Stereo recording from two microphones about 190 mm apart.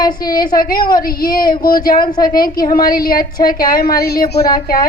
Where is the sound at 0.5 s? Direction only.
50° left (ahead or behind).